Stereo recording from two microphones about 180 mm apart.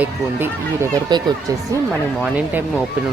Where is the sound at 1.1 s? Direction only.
25° right (ahead or behind).